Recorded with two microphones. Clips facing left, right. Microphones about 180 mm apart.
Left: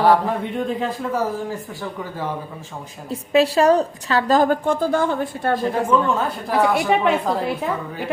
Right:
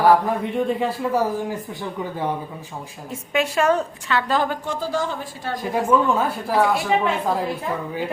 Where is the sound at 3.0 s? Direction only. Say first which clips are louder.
Left 6 dB; 35° left (ahead or behind); by 5.5 s 55° left (ahead or behind).